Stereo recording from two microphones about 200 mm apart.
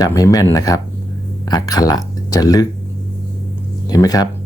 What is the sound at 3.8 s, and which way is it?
Speech, 20° left (ahead or behind).